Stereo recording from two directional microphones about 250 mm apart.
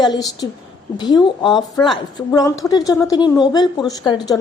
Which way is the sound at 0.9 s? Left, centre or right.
Centre.